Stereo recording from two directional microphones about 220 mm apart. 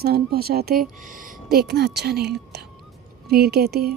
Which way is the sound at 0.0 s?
45° right (ahead or behind).